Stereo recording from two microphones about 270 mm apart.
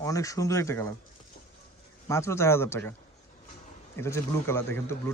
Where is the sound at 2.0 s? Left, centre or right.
Centre.